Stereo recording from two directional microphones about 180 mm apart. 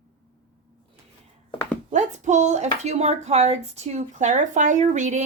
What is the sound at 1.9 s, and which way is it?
Speech, 40° right (ahead or behind).